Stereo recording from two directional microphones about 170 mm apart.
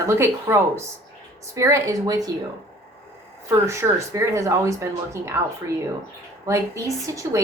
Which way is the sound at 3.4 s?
15° right (ahead or behind).